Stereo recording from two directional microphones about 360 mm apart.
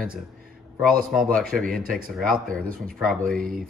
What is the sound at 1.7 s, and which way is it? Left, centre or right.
Speech, right.